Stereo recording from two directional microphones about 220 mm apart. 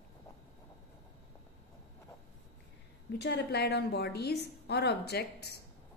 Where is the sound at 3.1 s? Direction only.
50° left (ahead or behind).